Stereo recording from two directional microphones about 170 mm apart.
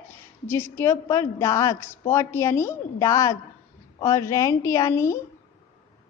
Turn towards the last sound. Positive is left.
turn(degrees=15)  # may be behind; listen again after turning